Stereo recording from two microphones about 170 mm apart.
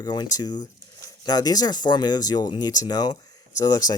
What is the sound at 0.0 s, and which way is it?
Speech, 25° left (ahead or behind).